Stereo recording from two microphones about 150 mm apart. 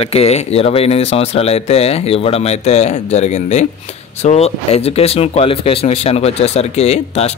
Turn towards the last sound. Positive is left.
turn(degrees=45)  # may be behind; listen again after turning